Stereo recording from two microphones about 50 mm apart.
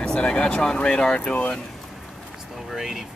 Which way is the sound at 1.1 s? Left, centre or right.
Left.